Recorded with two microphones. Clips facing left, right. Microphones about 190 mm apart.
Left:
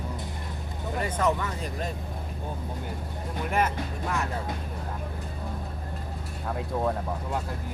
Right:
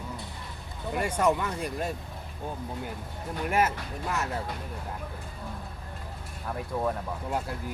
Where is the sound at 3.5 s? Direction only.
5° right (ahead or behind).